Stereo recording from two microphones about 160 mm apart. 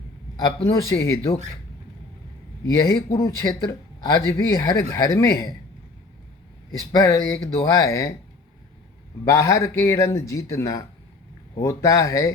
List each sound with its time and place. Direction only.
0.3 s speech: 20° left (ahead or behind)
3.2 s speech: 20° left (ahead or behind)
6.7 s speech: 15° left (ahead or behind)
9.2 s speech: 20° left (ahead or behind)